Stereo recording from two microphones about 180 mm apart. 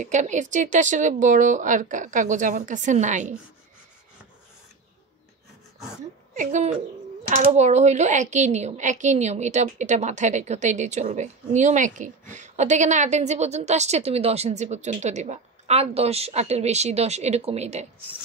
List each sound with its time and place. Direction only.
0.0 s speech: 40° right (ahead or behind)
6.3 s a woman's voice: 45° right (ahead or behind)